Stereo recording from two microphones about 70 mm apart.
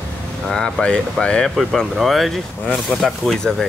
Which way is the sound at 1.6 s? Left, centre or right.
Centre.